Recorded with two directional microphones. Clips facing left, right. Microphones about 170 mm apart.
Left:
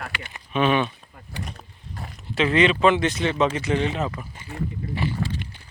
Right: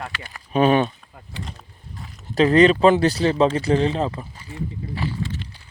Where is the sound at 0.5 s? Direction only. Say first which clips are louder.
Right 4 dB; 40° right (ahead or behind).